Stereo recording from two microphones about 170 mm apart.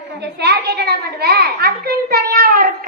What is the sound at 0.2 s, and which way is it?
A child's voice, 75° right (ahead or behind).